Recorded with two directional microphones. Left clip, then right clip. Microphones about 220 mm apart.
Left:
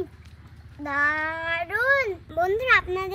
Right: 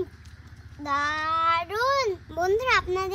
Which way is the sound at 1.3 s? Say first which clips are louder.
Right 3 dB; 40° right (ahead or behind).